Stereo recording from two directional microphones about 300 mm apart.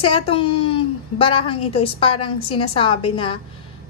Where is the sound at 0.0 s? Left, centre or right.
Centre.